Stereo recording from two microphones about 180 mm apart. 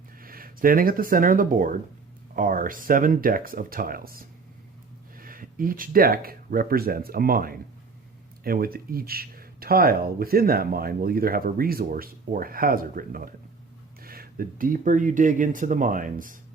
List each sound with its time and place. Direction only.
0.2 s speech: 55° right (ahead or behind)